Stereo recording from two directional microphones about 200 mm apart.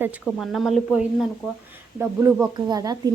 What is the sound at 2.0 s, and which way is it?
A woman's voice, 10° right (ahead or behind).